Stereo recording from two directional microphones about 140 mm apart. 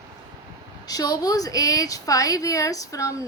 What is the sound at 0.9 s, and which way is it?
Speech, 25° left (ahead or behind).